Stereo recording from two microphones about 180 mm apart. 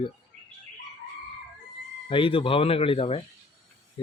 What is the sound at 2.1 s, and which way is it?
Speech, 30° left (ahead or behind).